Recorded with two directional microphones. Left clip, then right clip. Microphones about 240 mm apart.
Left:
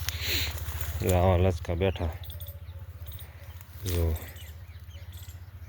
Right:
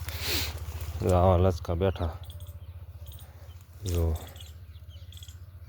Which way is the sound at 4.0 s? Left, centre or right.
Centre.